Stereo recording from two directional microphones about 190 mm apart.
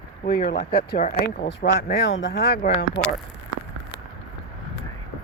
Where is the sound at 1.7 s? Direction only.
60° left (ahead or behind).